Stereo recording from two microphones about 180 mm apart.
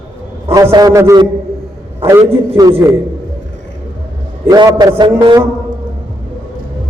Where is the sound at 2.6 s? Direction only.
15° right (ahead or behind).